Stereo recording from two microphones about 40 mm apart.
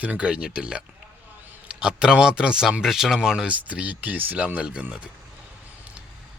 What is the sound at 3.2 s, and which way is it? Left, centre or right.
Speech, right.